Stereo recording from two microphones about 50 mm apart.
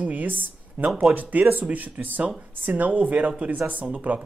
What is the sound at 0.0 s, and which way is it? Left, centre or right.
Speech, right.